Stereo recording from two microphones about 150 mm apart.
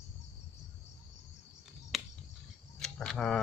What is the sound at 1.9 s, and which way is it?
Finger snapping, centre (ahead or behind).